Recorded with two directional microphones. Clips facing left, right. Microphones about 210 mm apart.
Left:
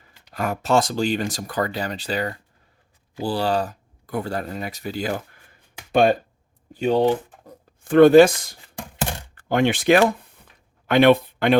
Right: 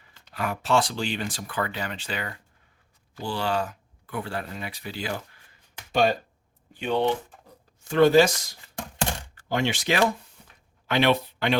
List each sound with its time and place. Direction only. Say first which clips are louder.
0.3 s speech: left 4 dB; 45° left (ahead or behind)
6.7 s speech: left 6 dB; 40° left (ahead or behind)
7.8 s speech: left 7 dB; 55° left (ahead or behind)